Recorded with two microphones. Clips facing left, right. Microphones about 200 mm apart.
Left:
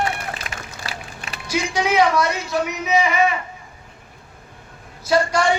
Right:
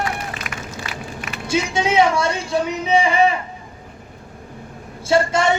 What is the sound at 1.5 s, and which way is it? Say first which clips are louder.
Speech: right 2 dB; 25° right (ahead or behind).